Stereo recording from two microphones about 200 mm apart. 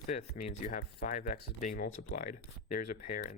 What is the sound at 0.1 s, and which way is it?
Speech, 35° left (ahead or behind).